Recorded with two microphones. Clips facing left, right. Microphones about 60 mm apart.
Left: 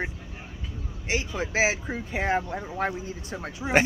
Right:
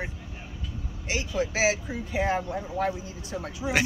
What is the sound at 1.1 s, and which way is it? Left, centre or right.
Speech, left.